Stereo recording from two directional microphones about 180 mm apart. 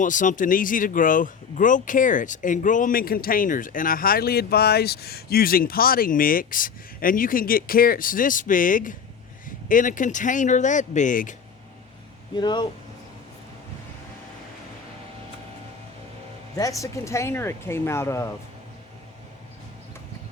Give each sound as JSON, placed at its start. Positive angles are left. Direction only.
{"t": 0.0, "sound": "speech", "side_deg": 45}
{"t": 12.4, "sound": "speech", "side_deg": 25}
{"t": 16.6, "sound": "speech", "side_deg": 20}